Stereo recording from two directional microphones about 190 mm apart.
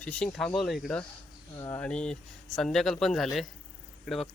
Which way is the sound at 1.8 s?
5° left (ahead or behind).